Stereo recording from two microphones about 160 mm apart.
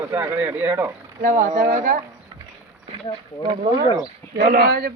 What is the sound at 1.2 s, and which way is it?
Speech, 55° right (ahead or behind).